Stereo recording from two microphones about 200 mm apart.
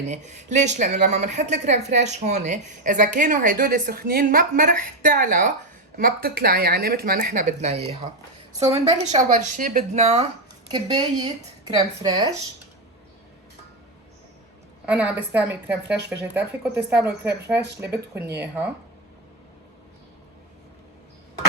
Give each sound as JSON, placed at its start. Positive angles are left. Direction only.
{"t": 0.1, "sound": "speech", "side_deg": -35}
{"t": 10.7, "sound": "a woman's voice", "side_deg": -20}
{"t": 14.8, "sound": "speech", "side_deg": -5}